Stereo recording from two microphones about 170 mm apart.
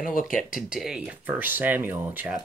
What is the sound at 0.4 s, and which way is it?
Speech, centre (ahead or behind).